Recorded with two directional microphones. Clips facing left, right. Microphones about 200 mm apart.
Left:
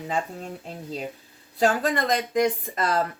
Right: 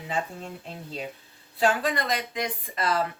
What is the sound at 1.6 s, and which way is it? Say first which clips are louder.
Speech: left 2 dB; 40° left (ahead or behind).